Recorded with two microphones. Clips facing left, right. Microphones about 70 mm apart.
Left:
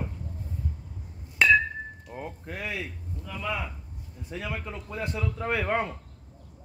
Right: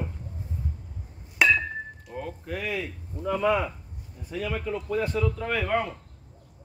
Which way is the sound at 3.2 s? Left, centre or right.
Right.